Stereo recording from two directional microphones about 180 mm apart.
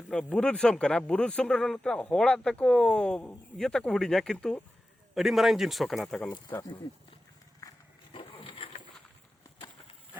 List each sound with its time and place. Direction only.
0.1 s speech: 5° left (ahead or behind)
6.5 s speech: 20° left (ahead or behind)
8.1 s vehicle: 30° left (ahead or behind)